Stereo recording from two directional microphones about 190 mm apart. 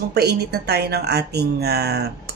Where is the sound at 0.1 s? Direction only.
60° right (ahead or behind).